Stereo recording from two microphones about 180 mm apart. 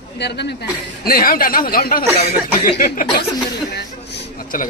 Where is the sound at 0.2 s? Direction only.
65° left (ahead or behind); by 3.3 s 50° left (ahead or behind).